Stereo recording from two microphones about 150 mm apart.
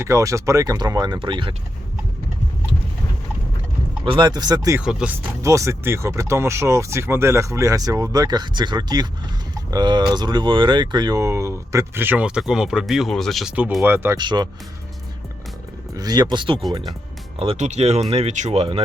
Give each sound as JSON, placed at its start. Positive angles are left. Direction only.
{"t": 0.0, "sound": "speech", "side_deg": -20}
{"t": 4.0, "sound": "speech", "side_deg": -35}
{"t": 4.8, "sound": "speech", "side_deg": -5}
{"t": 5.4, "sound": "speech", "side_deg": -20}
{"t": 13.8, "sound": "speech", "side_deg": -15}
{"t": 14.2, "sound": "speech", "side_deg": -30}
{"t": 16.0, "sound": "speech", "side_deg": -25}
{"t": 17.4, "sound": "speech", "side_deg": -45}